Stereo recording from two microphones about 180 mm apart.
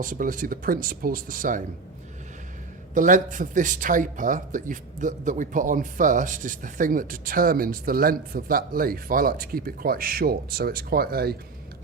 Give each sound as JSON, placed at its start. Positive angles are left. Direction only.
{"t": 0.0, "sound": "speech", "side_deg": -50}
{"t": 2.9, "sound": "speech", "side_deg": -45}